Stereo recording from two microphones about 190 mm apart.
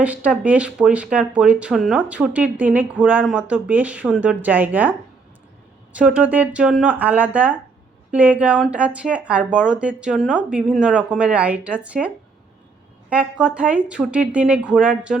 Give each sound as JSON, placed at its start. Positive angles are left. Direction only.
{"t": 0.0, "sound": "speech", "side_deg": -5}